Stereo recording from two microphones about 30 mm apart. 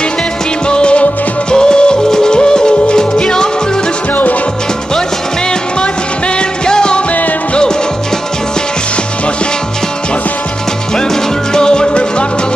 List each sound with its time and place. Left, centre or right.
0.7 s music: left
4.1 s music: left
6.6 s music: left
11.5 s music: left